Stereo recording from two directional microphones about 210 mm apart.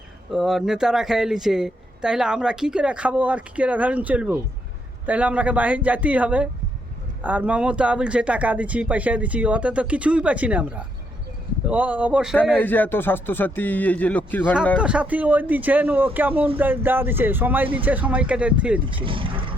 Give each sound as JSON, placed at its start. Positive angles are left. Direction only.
{"t": 0.3, "sound": "speech", "side_deg": 0}
{"t": 12.5, "sound": "speech", "side_deg": 10}
{"t": 14.8, "sound": "speech", "side_deg": -5}
{"t": 18.9, "sound": "vehicle", "side_deg": -25}